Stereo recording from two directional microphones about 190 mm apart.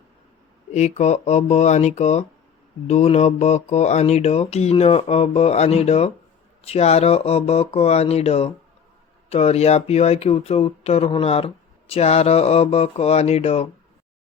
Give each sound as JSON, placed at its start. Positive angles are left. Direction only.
{"t": 0.7, "sound": "speech", "side_deg": 35}